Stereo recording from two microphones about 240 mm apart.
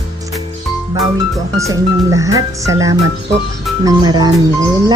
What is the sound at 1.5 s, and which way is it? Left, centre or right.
Speech, centre.